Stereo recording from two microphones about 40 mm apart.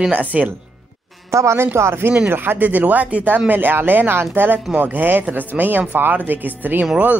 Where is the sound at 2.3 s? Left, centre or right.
Right.